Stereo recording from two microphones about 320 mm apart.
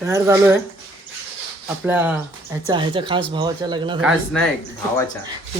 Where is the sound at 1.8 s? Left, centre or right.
Centre.